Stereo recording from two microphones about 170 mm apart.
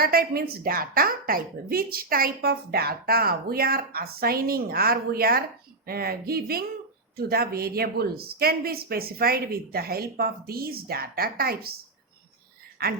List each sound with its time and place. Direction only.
0.0 s a woman's voice: 60° right (ahead or behind)
12.8 s a woman's voice: 65° right (ahead or behind)